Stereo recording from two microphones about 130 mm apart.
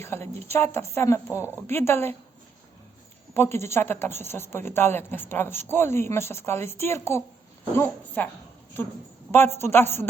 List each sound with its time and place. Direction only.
0.0 s a woman's voice: 20° left (ahead or behind)
3.3 s a woman's voice: 20° left (ahead or behind)
9.3 s a woman's voice: 20° left (ahead or behind)